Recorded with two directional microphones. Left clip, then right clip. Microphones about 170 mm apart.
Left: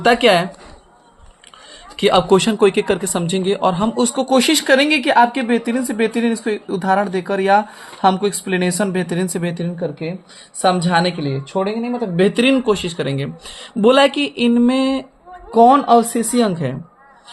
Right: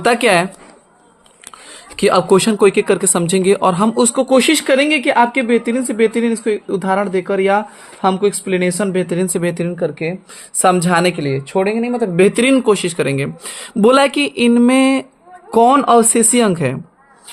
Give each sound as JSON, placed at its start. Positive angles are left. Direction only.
{"t": 0.0, "sound": "speech", "side_deg": -35}
{"t": 2.0, "sound": "speech", "side_deg": -35}
{"t": 15.5, "sound": "speech", "side_deg": -55}